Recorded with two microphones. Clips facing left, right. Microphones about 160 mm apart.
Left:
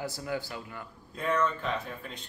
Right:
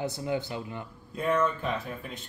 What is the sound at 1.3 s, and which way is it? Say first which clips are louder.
Speech: right 2 dB; 10° right (ahead or behind).